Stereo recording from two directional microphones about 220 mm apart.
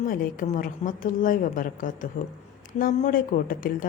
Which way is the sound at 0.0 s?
35° left (ahead or behind).